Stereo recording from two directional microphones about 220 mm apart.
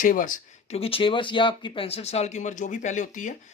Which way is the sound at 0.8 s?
25° left (ahead or behind).